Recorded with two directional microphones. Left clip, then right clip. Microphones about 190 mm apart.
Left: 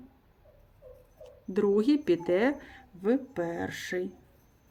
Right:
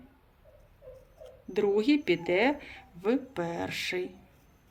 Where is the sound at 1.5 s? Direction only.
50° left (ahead or behind).